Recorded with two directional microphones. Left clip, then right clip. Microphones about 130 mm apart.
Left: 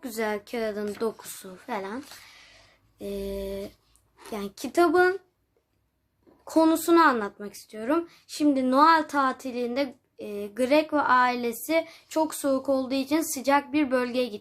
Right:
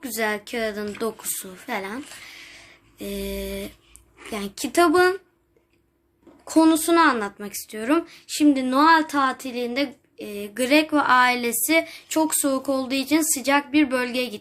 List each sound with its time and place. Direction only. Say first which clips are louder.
0.0 s a woman's voice: right 4 dB; 35° left (ahead or behind)
6.4 s speech: right 4 dB; 45° left (ahead or behind)
7.3 s speech: right 5 dB; 10° left (ahead or behind)
8.1 s a sound: right 5 dB; 30° left (ahead or behind)